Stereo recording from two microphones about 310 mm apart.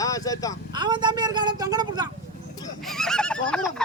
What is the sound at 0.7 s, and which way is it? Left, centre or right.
A man's voice, centre.